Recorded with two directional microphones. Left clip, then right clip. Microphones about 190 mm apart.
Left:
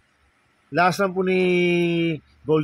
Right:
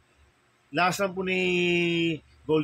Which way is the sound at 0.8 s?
40° left (ahead or behind).